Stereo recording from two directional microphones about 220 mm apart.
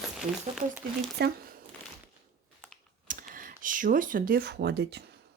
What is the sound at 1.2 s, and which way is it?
Speech, 50° right (ahead or behind).